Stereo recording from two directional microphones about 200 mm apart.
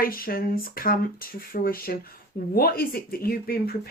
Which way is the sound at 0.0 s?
45° left (ahead or behind).